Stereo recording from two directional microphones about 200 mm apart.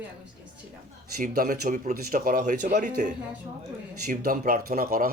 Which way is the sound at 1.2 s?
45° right (ahead or behind).